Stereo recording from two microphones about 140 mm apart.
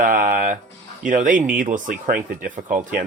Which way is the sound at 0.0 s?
75° right (ahead or behind).